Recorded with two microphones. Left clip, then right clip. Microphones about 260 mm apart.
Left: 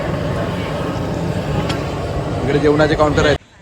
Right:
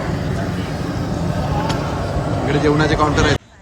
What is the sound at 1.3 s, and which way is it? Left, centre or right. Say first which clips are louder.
Vehicle: even; centre.